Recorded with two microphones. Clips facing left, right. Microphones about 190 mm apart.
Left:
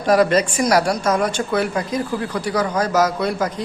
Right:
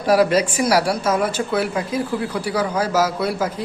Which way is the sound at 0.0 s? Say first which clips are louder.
Even; 5° right (ahead or behind).